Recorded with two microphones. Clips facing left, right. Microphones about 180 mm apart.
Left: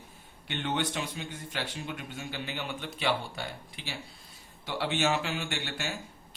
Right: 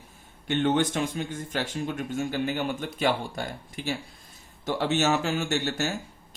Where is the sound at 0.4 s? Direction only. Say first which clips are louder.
Right 8 dB; 45° right (ahead or behind).